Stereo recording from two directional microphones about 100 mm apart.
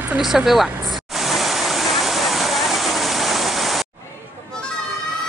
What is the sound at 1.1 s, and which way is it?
Waterfall, centre (ahead or behind).